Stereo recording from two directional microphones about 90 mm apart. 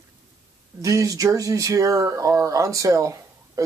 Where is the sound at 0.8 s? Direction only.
35° right (ahead or behind).